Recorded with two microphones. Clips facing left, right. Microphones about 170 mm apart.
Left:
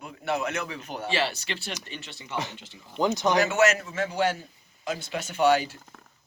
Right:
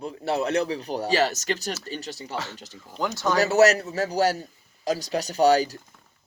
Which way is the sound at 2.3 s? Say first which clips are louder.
Left 1 dB; 20° left (ahead or behind).